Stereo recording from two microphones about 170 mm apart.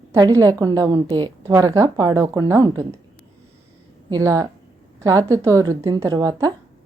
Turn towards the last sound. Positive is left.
turn(degrees=-20)  # may be behind; listen again after turning